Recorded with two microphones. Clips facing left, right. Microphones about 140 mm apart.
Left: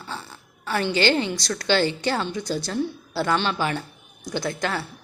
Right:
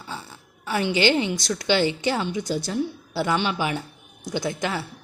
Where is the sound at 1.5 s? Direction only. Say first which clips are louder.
Left 1 dB; 15° right (ahead or behind).